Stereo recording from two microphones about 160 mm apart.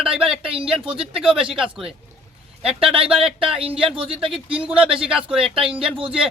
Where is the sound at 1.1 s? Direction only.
5° right (ahead or behind).